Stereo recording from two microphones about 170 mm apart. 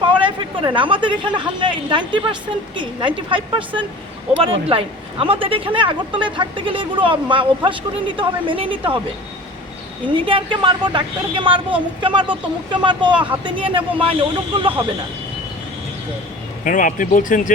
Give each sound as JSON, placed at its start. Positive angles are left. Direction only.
{"t": 0.0, "sound": "speech", "side_deg": -30}
{"t": 10.2, "sound": "speech", "side_deg": -30}
{"t": 16.6, "sound": "speech", "side_deg": 50}